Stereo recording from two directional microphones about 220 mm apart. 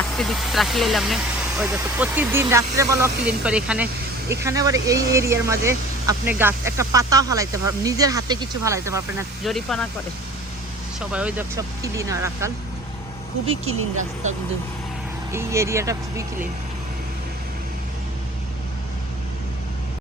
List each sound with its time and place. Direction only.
0.2 s speech: centre (ahead or behind)
9.4 s speech: centre (ahead or behind)
11.0 s speech: 5° right (ahead or behind)
13.9 s speech: 35° right (ahead or behind)
15.3 s speech: 10° right (ahead or behind)